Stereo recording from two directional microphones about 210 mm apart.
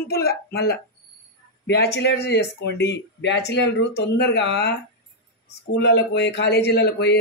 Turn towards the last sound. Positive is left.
turn(degrees=50)  # may be behind; listen again after turning